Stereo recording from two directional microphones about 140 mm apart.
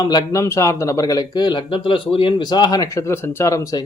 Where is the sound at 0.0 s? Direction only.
25° left (ahead or behind).